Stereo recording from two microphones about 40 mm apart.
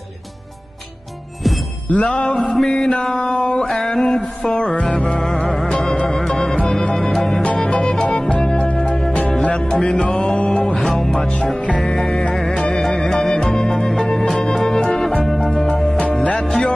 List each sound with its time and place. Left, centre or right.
1.9 s music: left
2.6 s chant: centre
3.2 s music: left
3.6 s music: centre
4.4 s music: left
5.0 s music: centre; by 8.6 s left
8.6 s music: left
9.4 s music: left
10.9 s music: centre